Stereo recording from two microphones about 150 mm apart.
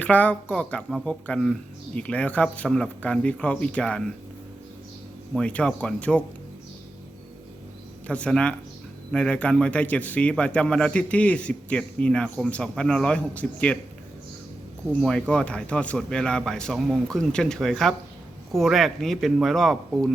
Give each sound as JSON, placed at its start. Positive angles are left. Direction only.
{"t": 0.0, "sound": "a man's voice", "side_deg": 10}
{"t": 5.3, "sound": "a man's voice", "side_deg": 5}
{"t": 8.0, "sound": "a man's voice", "side_deg": 10}
{"t": 15.0, "sound": "a man's voice", "side_deg": 5}